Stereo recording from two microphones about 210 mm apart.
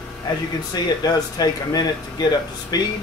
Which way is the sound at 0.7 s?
20° left (ahead or behind).